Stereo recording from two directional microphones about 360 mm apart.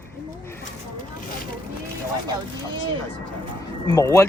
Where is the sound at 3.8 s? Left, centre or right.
Centre.